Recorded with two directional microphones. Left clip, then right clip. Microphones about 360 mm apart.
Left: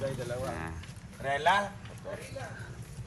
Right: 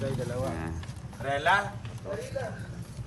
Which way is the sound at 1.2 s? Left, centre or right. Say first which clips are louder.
Right 2 dB; centre.